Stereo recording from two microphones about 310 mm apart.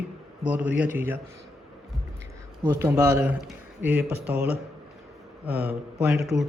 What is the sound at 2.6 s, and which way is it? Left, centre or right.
Speech, centre.